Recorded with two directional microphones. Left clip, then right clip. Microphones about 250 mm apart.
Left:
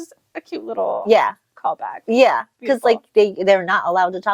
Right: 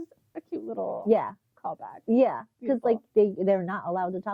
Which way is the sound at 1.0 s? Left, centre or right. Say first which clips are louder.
Left 9 dB; centre.